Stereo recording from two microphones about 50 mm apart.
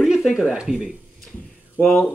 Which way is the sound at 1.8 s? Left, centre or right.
Centre.